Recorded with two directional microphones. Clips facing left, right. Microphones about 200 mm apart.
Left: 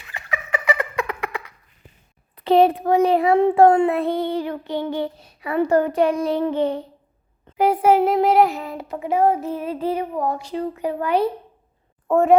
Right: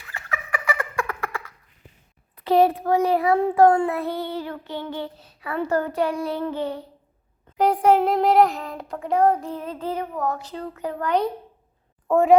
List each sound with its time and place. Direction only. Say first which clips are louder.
0.0 s turkey: left 3 dB; 15° left (ahead or behind)
2.3 s child singing: left 3 dB; 25° left (ahead or behind)
7.5 s a sound: left 1 dB; 5° left (ahead or behind)